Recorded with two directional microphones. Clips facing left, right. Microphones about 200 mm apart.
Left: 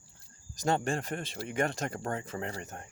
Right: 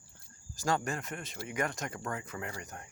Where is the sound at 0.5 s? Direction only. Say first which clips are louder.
Left 3 dB; 20° left (ahead or behind).